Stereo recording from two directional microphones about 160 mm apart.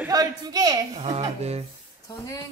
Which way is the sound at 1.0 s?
40° right (ahead or behind).